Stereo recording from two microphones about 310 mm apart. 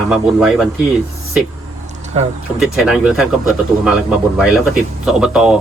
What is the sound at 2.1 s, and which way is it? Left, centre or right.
Speech, centre.